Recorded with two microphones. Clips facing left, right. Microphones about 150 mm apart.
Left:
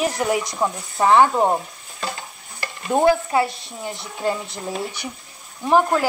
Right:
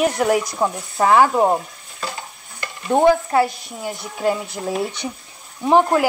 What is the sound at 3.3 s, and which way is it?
Speech, centre (ahead or behind).